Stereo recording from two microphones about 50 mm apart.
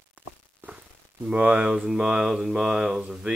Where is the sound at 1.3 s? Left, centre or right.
Right.